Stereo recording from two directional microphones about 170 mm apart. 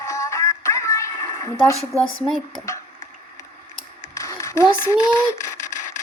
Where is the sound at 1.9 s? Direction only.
Centre (ahead or behind).